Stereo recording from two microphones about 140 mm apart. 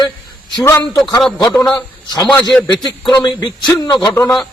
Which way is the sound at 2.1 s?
30° left (ahead or behind).